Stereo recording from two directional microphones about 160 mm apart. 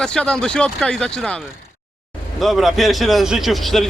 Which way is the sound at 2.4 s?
Centre (ahead or behind).